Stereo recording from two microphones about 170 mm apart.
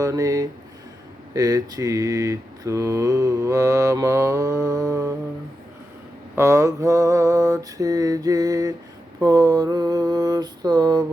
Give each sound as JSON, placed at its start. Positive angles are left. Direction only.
{"t": 0.0, "sound": "mantra", "side_deg": -20}
{"t": 6.3, "sound": "mantra", "side_deg": -15}